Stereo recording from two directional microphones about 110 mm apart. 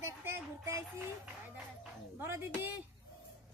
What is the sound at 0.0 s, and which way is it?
Child singing, 25° right (ahead or behind).